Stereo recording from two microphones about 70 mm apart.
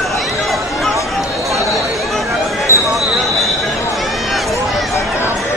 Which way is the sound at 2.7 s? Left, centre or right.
Right.